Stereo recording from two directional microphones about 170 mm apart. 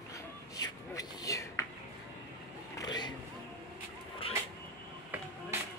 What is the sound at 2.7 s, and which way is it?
Vehicle, 25° left (ahead or behind).